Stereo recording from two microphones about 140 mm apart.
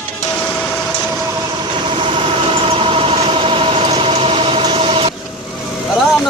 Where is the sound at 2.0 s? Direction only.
40° right (ahead or behind).